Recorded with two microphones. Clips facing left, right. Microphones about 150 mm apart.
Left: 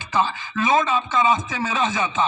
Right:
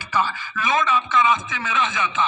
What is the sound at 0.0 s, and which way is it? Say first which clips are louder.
A man's voice: left 1 dB; 20° left (ahead or behind).